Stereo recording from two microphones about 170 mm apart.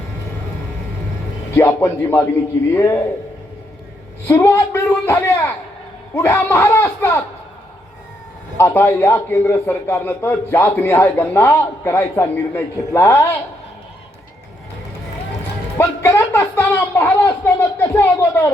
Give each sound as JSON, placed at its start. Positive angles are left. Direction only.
{"t": 1.5, "sound": "a man's voice", "side_deg": 15}
{"t": 4.3, "sound": "a man's voice", "side_deg": 15}
{"t": 8.5, "sound": "a man's voice", "side_deg": 15}
{"t": 15.8, "sound": "a man's voice", "side_deg": 15}